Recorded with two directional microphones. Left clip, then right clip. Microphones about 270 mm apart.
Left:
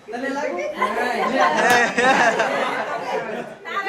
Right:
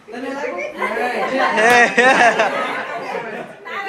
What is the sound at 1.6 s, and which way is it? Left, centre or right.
Speech, centre.